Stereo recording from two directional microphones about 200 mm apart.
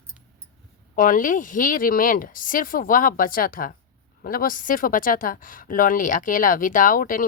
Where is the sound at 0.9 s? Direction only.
40° left (ahead or behind).